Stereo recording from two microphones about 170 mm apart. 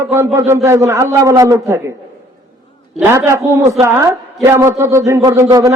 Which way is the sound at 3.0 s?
15° right (ahead or behind).